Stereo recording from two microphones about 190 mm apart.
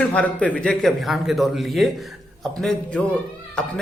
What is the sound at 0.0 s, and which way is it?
A man's voice, 5° left (ahead or behind).